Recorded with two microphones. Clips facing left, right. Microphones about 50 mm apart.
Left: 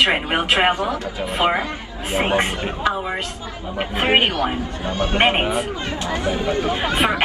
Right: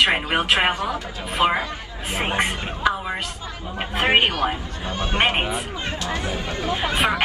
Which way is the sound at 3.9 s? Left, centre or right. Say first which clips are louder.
Left 1 dB; left.